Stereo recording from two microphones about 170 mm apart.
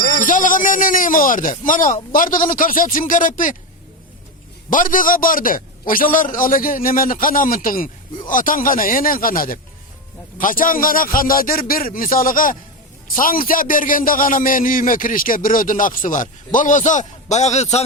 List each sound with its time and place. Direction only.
0.2 s a man's voice: 50° left (ahead or behind)
4.7 s a man's voice: 50° left (ahead or behind)